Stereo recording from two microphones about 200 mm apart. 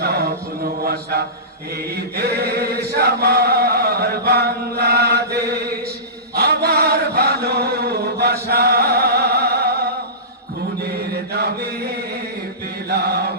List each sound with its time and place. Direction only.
0.0 s chant: 50° right (ahead or behind)
10.9 s chant: 55° right (ahead or behind)